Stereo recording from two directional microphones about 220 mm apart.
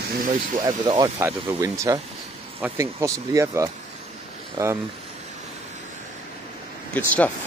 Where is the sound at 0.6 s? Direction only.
20° right (ahead or behind).